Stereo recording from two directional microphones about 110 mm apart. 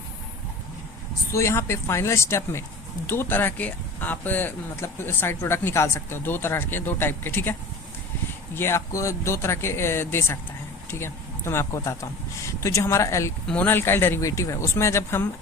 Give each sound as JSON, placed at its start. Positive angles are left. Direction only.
{"t": 1.3, "sound": "speech", "side_deg": 25}
{"t": 8.5, "sound": "speech", "side_deg": 25}